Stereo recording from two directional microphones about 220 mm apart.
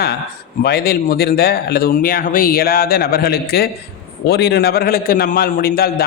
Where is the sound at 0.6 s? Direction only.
45° left (ahead or behind).